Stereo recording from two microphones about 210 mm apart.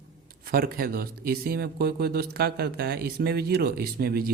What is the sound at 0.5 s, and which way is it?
Speech, 45° right (ahead or behind).